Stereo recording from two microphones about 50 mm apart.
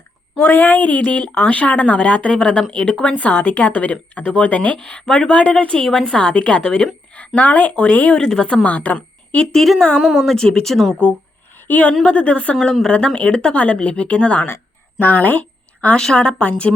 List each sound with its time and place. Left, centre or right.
0.3 s speech: left
4.8 s speech: centre
7.1 s speech: left
8.2 s speech: centre
8.6 s speech: left
9.5 s speech: centre
10.0 s a woman's voice: centre
10.3 s speech: centre
11.5 s a woman's voice: left
14.9 s a woman's voice: left
16.0 s speech: centre